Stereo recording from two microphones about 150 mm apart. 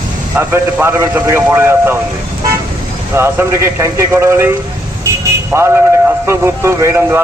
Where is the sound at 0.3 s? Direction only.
15° right (ahead or behind).